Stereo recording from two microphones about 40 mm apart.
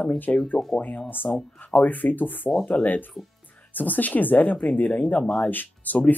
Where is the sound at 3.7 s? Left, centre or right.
Left.